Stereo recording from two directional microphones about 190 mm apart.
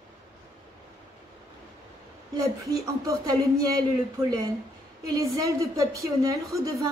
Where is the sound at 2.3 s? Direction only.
15° right (ahead or behind).